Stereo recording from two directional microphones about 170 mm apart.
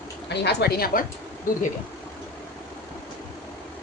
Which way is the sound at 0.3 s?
75° left (ahead or behind).